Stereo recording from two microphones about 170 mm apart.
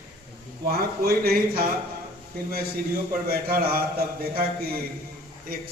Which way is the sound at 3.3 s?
60° right (ahead or behind).